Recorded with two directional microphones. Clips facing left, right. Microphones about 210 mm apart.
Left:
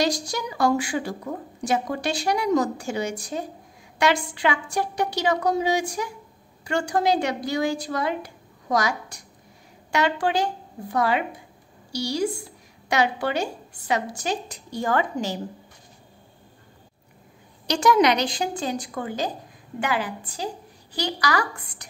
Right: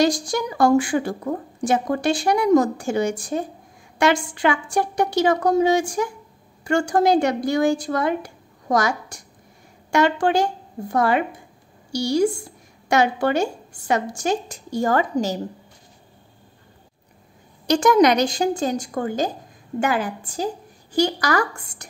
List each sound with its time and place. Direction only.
0.0 s a woman's voice: 50° right (ahead or behind)
17.6 s a woman's voice: 50° right (ahead or behind)